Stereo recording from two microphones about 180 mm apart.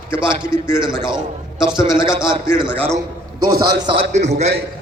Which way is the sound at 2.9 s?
20° right (ahead or behind).